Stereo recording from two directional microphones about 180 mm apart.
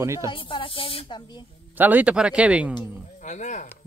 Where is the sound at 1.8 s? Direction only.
10° right (ahead or behind).